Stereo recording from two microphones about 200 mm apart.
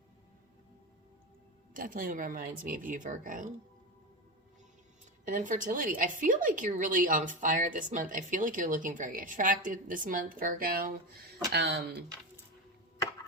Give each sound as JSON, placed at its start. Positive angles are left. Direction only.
{"t": 1.7, "sound": "speech", "side_deg": -45}
{"t": 5.3, "sound": "speech", "side_deg": -40}